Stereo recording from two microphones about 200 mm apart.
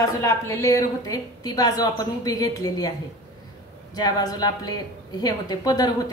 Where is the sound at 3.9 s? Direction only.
20° left (ahead or behind).